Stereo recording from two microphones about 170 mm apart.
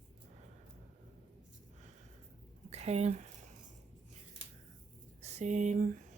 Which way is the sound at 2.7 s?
40° right (ahead or behind).